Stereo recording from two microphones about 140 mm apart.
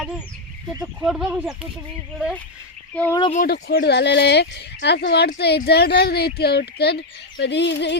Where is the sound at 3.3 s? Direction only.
70° left (ahead or behind).